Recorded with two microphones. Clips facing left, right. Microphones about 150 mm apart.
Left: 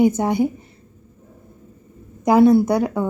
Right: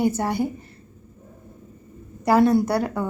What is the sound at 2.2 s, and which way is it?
Speech, 10° left (ahead or behind).